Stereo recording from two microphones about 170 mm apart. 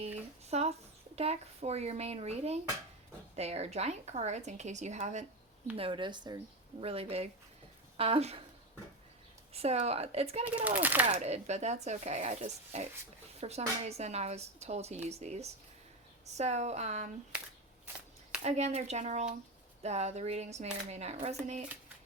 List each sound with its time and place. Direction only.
0.5 s a woman's voice: 40° right (ahead or behind)
5.7 s a woman's voice: 30° right (ahead or behind)
9.5 s a woman's voice: 35° right (ahead or behind)
10.4 s a child's voice: 10° right (ahead or behind)
11.1 s a woman's voice: 40° right (ahead or behind)
18.4 s a woman's voice: 40° right (ahead or behind)